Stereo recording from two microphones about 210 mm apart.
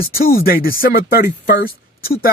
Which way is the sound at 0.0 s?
45° left (ahead or behind).